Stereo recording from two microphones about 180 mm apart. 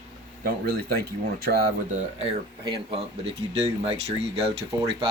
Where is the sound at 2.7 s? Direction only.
30° right (ahead or behind).